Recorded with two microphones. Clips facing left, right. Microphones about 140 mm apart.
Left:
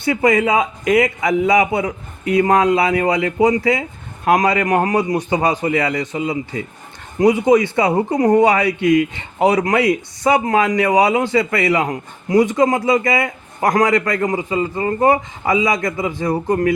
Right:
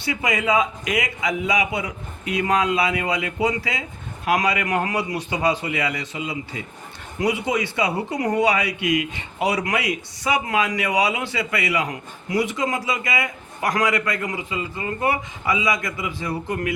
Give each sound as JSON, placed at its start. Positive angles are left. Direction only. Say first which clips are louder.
{"t": 0.0, "sound": "a man's voice", "louder": "left 8 dB", "side_deg": 50}